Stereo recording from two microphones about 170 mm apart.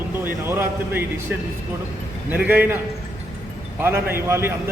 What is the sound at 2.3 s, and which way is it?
Speech, 10° right (ahead or behind).